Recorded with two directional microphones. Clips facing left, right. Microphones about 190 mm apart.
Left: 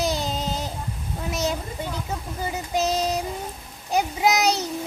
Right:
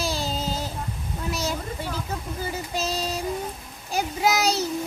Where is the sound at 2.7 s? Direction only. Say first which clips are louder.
Left 6 dB; 20° left (ahead or behind).